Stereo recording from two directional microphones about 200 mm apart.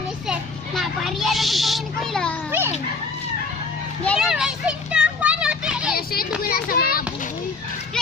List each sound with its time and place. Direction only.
0.3 s children playing: centre (ahead or behind)
4.0 s children playing: centre (ahead or behind)
6.0 s children playing: 50° left (ahead or behind)